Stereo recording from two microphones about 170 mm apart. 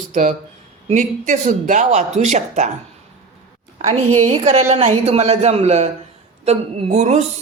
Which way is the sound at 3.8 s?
40° right (ahead or behind).